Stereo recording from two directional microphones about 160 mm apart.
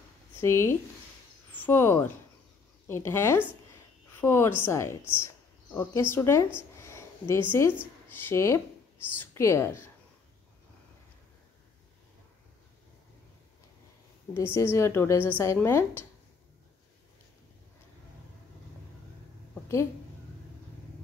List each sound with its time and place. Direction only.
0.4 s a woman's voice: 15° left (ahead or behind)
14.3 s a woman's voice: 15° left (ahead or behind)